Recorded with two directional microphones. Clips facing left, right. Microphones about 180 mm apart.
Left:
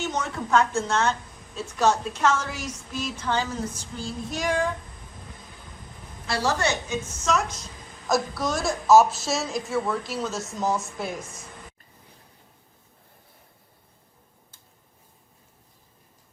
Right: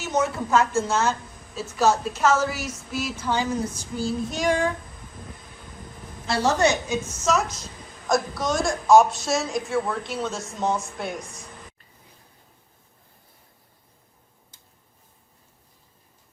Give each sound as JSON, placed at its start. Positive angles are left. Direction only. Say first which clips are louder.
{"t": 0.0, "sound": "a woman's voice", "louder": "right 4 dB", "side_deg": -5}
{"t": 6.2, "sound": "a woman's voice", "louder": "right 4 dB", "side_deg": -20}
{"t": 7.3, "sound": "a woman's voice", "louder": "right 2 dB", "side_deg": 0}